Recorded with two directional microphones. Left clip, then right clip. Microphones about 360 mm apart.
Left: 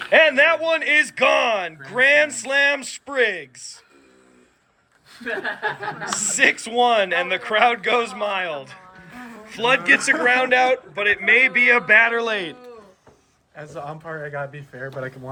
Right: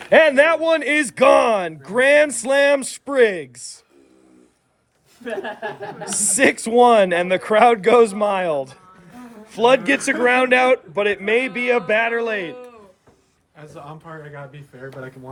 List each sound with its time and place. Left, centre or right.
0.0 s a man's voice: right
6.1 s a man's voice: centre
13.6 s speech: left